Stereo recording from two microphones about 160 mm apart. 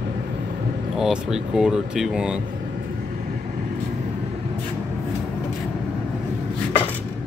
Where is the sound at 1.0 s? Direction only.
5° right (ahead or behind).